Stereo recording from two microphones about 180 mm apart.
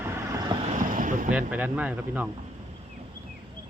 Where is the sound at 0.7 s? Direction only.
45° right (ahead or behind).